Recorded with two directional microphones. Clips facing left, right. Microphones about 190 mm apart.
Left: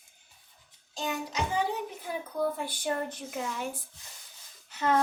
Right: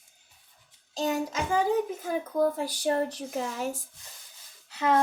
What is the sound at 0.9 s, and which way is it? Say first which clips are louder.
A child's voice: right 5 dB; 40° right (ahead or behind).